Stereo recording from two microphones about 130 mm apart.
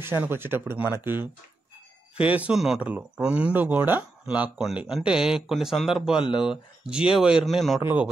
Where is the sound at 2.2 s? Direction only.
10° right (ahead or behind).